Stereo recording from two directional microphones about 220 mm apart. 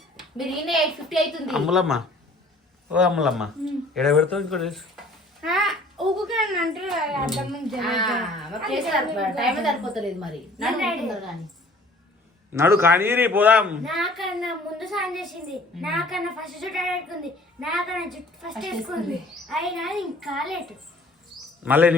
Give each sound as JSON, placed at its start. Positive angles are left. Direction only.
{"t": 0.3, "sound": "a child's voice", "side_deg": 0}
{"t": 12.5, "sound": "a child's voice", "side_deg": -10}